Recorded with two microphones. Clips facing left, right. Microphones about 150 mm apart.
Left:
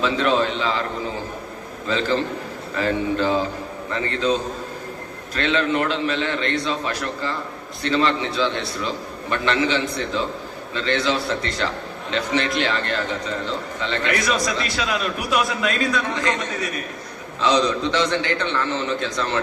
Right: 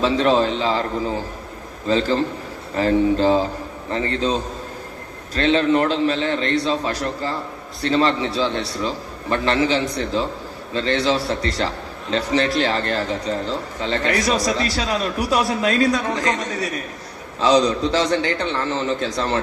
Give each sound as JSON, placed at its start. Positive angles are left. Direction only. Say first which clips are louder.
{"t": 0.0, "sound": "a man's voice", "louder": "right 3 dB", "side_deg": -35}